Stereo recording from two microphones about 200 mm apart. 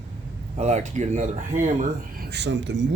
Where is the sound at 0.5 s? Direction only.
35° right (ahead or behind).